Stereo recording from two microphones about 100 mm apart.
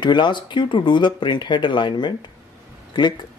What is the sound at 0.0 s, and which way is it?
Speech, 50° left (ahead or behind).